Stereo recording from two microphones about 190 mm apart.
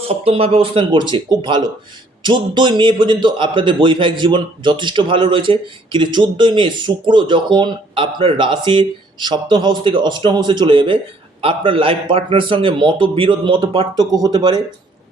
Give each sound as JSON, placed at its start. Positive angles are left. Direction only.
{"t": 0.1, "sound": "a man's voice", "side_deg": -30}